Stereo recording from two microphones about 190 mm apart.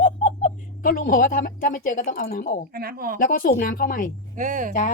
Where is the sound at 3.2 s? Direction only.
45° left (ahead or behind).